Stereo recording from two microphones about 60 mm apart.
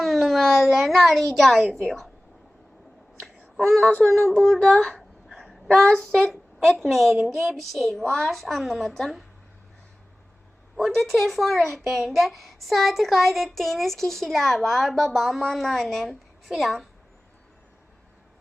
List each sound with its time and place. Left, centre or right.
0.0 s a sound: centre
1.8 s speech: centre
3.2 s a sound: centre
4.3 s speech: centre
4.6 s a child's voice: centre
10.8 s speech: centre